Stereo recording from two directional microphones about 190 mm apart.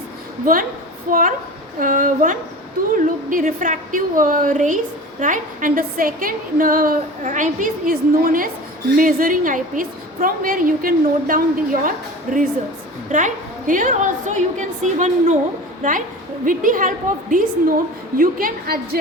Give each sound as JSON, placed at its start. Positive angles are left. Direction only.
{"t": 1.1, "sound": "a woman's voice", "side_deg": -45}